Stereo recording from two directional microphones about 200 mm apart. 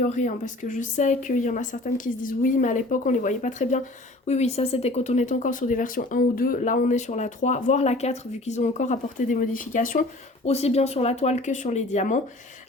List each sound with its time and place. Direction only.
0.0 s speech: 40° left (ahead or behind)